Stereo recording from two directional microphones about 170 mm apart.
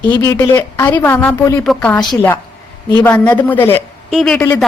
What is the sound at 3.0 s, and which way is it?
Speech, 10° left (ahead or behind).